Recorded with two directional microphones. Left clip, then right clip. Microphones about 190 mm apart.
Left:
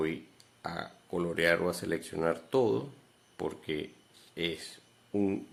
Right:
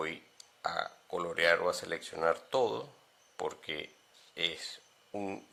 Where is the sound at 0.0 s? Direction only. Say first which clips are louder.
Left 4 dB; 25° right (ahead or behind).